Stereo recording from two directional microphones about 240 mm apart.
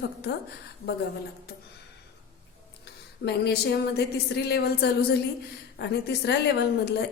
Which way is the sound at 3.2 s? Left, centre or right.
Left.